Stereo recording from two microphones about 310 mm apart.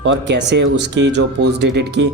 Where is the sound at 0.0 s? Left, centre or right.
Right.